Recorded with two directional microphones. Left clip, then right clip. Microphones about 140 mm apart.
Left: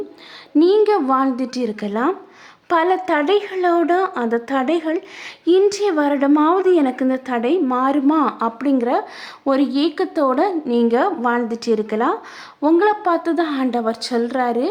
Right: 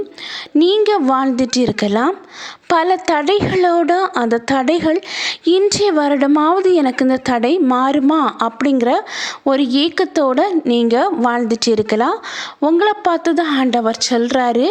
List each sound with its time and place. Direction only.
0.5 s speech: 15° right (ahead or behind)
0.9 s a woman's voice: 30° right (ahead or behind)